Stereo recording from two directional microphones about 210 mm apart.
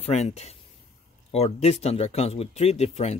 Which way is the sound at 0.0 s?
30° left (ahead or behind).